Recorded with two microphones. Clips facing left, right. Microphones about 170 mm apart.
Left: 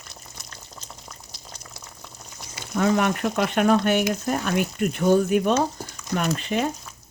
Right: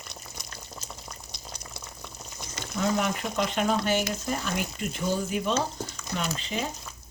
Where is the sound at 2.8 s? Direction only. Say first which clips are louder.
Left 6 dB; 65° left (ahead or behind).